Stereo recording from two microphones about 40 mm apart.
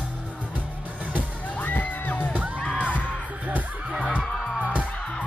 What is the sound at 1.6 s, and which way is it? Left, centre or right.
Music, left.